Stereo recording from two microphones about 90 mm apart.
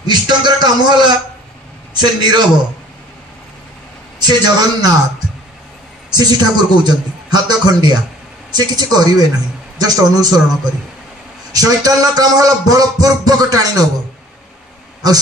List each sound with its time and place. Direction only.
0.0 s a man's voice: 55° right (ahead or behind)
2.0 s music: 55° right (ahead or behind)
4.2 s music: 50° right (ahead or behind)
6.1 s music: 50° right (ahead or behind)
11.5 s music: 45° right (ahead or behind)